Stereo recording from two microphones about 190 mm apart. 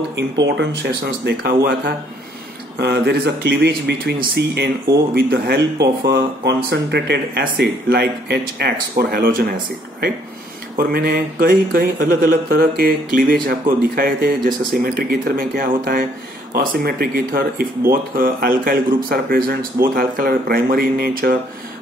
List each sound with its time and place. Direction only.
0.1 s speech: 65° right (ahead or behind); by 2.0 s 50° right (ahead or behind)
2.8 s speech: 60° right (ahead or behind)